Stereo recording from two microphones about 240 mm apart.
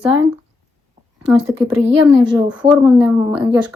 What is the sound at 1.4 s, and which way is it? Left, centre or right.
Speech, centre.